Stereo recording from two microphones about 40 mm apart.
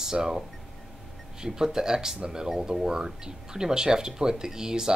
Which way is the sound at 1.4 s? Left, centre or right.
Centre.